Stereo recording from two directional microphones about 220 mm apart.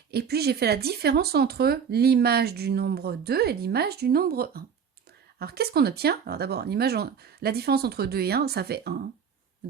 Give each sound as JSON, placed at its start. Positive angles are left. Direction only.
{"t": 0.1, "sound": "speech", "side_deg": -45}